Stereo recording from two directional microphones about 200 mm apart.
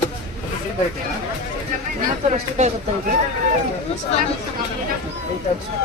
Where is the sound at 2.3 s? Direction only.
35° right (ahead or behind).